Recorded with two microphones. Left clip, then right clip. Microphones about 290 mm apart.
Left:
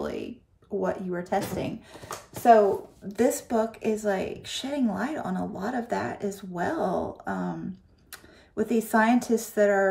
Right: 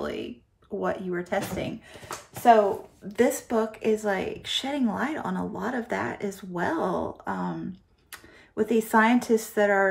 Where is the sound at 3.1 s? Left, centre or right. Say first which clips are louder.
Right 1 dB; centre.